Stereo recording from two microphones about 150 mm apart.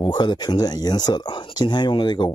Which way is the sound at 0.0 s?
30° left (ahead or behind).